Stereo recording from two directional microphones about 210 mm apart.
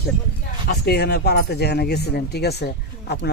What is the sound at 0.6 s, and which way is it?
Speech, 50° left (ahead or behind).